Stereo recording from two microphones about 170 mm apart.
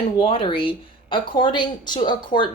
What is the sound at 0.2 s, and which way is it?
A woman's voice, 30° left (ahead or behind).